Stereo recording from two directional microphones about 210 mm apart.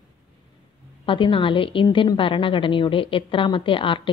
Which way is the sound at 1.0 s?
25° left (ahead or behind).